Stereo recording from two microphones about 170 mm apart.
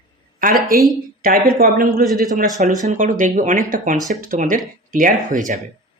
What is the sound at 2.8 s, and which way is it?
Speech, 50° right (ahead or behind).